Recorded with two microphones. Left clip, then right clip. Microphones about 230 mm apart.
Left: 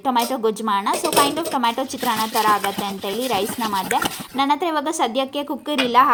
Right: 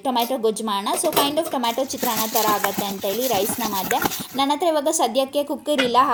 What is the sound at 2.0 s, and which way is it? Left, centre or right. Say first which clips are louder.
Speech: left 4 dB; left.